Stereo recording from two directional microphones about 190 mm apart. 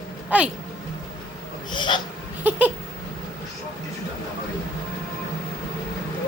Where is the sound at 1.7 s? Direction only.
25° left (ahead or behind).